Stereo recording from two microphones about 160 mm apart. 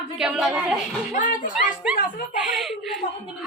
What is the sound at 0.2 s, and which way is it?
Speech, 5° right (ahead or behind).